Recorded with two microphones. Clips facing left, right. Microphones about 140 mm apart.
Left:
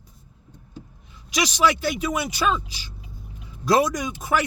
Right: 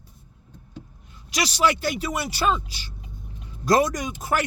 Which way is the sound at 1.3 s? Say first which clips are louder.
Left 1 dB; 40° right (ahead or behind).